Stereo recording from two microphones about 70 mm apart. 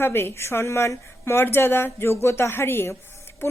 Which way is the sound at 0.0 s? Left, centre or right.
Left.